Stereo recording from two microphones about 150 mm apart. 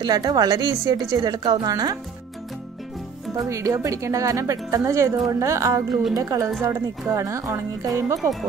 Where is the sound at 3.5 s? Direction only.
20° right (ahead or behind).